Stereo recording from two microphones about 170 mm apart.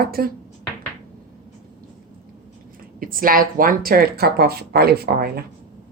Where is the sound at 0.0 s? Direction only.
65° right (ahead or behind).